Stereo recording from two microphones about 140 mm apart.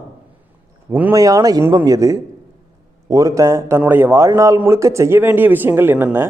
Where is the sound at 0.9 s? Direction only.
10° right (ahead or behind).